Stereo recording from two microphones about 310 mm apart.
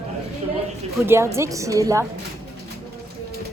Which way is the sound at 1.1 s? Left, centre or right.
Centre.